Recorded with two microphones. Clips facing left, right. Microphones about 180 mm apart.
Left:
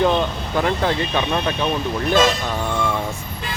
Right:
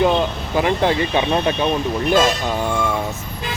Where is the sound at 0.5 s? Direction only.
10° right (ahead or behind).